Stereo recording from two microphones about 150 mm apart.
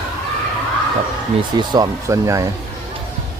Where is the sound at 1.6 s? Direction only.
25° right (ahead or behind).